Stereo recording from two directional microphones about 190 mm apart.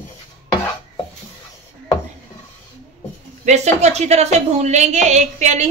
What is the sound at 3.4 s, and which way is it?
A woman's voice, 35° right (ahead or behind).